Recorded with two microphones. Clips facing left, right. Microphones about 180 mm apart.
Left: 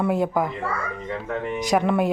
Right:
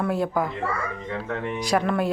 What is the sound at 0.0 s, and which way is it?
Speech, 15° left (ahead or behind).